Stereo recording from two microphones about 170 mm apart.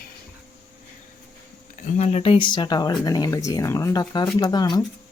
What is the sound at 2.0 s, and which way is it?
Speech, 35° left (ahead or behind).